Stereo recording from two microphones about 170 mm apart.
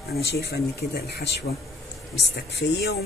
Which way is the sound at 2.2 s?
80° left.